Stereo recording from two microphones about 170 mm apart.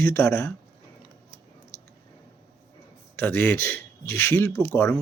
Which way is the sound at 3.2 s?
10° left (ahead or behind).